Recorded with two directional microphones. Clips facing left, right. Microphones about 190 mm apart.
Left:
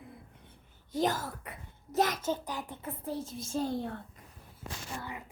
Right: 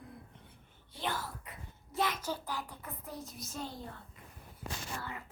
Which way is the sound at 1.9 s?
40° left (ahead or behind).